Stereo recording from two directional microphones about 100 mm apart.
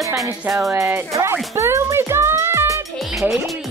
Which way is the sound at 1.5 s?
25° right (ahead or behind).